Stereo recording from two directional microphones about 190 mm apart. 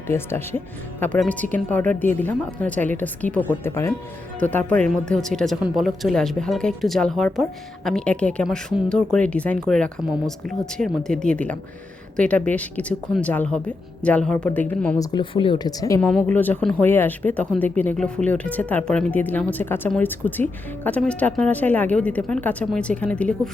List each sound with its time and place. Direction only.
0.1 s speech: 10° left (ahead or behind)
14.9 s a woman's voice: 25° left (ahead or behind)
16.0 s speech: 5° left (ahead or behind)